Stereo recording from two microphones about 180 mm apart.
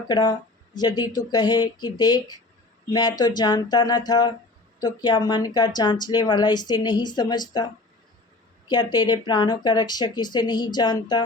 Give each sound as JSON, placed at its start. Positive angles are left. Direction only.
{"t": 0.1, "sound": "speech", "side_deg": 25}